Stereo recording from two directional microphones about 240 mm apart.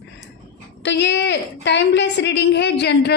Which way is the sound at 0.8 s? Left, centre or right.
Left.